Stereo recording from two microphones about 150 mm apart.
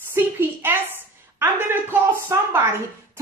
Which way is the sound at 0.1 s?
15° right (ahead or behind).